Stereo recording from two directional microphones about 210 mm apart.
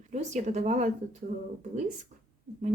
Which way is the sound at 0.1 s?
35° right (ahead or behind).